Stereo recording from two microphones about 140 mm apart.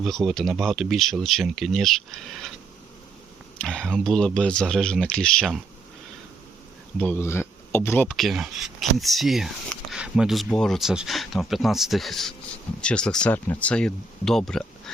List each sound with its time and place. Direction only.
0.0 s speech: centre (ahead or behind)
3.6 s speech: 5° left (ahead or behind)
7.0 s speech: 15° left (ahead or behind)
8.0 s speech: centre (ahead or behind)